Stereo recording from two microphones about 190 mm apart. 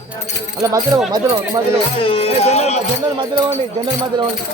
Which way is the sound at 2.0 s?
30° left (ahead or behind).